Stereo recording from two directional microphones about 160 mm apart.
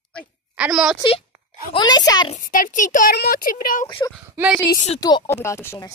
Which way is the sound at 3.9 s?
25° left (ahead or behind).